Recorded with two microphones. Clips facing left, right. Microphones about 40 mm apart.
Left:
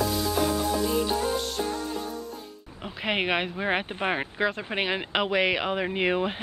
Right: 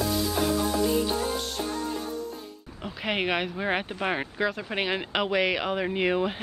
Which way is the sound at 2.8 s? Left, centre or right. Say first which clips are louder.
Left 1 dB; centre.